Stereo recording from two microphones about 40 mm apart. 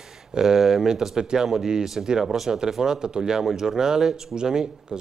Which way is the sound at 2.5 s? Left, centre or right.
Centre.